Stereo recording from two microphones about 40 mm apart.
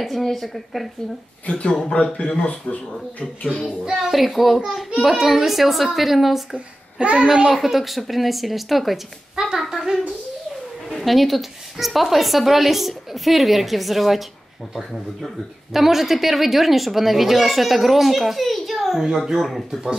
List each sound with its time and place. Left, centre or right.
0.0 s a woman's voice: centre
1.4 s speech: left
3.9 s a woman's voice: centre
6.5 s a child's voice: right
7.5 s a woman's voice: centre
10.9 s a woman's voice: centre